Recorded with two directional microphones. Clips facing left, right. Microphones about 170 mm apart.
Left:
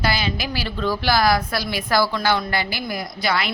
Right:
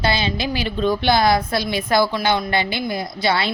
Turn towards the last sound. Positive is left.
turn(degrees=-25)  # may be behind; listen again after turning